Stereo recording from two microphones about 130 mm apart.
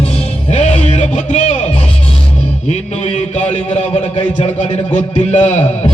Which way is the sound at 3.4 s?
10° left (ahead or behind).